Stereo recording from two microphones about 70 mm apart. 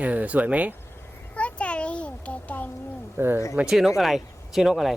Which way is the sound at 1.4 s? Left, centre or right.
Centre.